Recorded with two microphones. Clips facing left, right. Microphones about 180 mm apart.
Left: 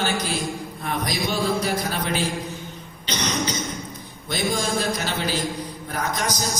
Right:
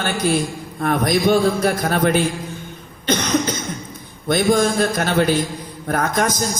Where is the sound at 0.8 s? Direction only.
55° right (ahead or behind).